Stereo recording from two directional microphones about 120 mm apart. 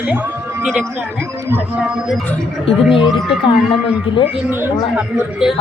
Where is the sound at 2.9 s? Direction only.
45° left (ahead or behind).